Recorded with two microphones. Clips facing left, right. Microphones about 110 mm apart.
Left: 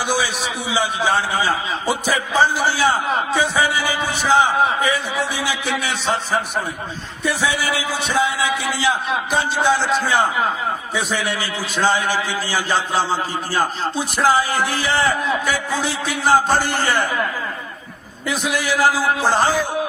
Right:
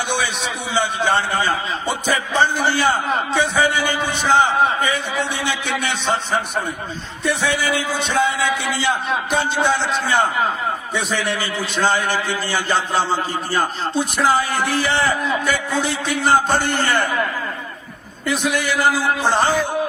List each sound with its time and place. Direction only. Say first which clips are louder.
0.1 s a man's voice: left 1 dB; centre (ahead or behind)
18.3 s a man's voice: right 1 dB; centre (ahead or behind)